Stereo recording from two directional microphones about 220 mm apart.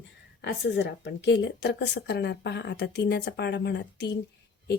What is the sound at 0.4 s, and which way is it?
Speech, 50° left (ahead or behind).